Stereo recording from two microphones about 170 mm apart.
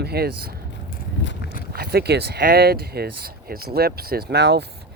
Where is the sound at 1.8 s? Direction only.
70° right (ahead or behind).